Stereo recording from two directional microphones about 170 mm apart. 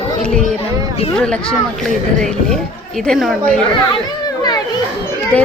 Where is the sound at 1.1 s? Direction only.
5° left (ahead or behind).